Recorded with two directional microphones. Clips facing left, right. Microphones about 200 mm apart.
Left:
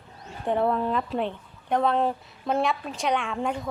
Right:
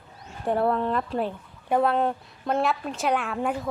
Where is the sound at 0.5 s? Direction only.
Centre (ahead or behind).